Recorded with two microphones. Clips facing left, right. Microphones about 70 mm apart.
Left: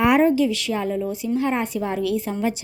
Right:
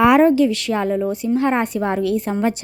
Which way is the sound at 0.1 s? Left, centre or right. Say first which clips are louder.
Right 4 dB; right.